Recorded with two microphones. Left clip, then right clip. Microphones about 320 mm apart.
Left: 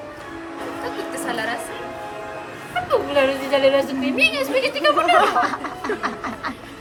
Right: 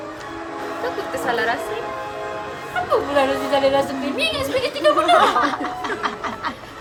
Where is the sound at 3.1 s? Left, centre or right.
Right.